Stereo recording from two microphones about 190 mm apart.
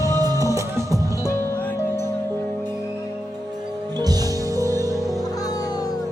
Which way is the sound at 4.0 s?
20° right (ahead or behind).